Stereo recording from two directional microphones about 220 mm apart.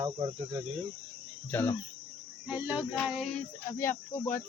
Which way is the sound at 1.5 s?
10° left (ahead or behind).